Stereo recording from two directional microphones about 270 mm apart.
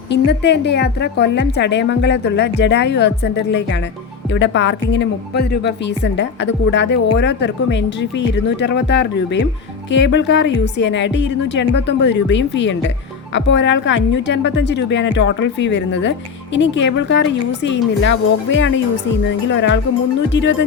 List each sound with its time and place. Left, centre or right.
0.1 s a woman's voice: left
19.5 s a woman's voice: left